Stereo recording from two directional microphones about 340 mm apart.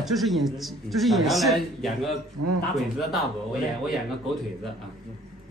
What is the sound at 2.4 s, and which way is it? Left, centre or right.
Speech, right.